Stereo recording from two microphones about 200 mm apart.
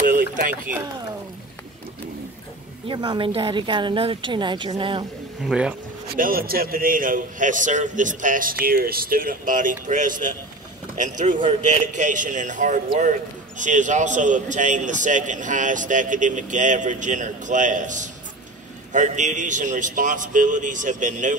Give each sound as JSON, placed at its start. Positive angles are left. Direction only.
{"t": 0.0, "sound": "a sound", "side_deg": -45}
{"t": 2.9, "sound": "a woman's voice", "side_deg": -20}
{"t": 5.4, "sound": "speech", "side_deg": -5}
{"t": 6.1, "sound": "a man's voice", "side_deg": -45}